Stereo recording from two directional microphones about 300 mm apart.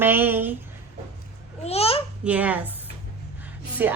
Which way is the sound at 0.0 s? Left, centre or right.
Centre.